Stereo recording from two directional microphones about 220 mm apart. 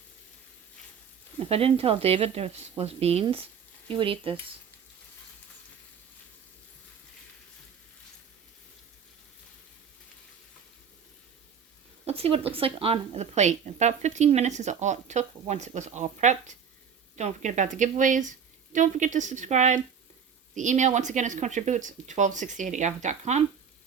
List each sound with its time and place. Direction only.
1.5 s speech: 25° right (ahead or behind)
12.0 s a woman's voice: 25° right (ahead or behind)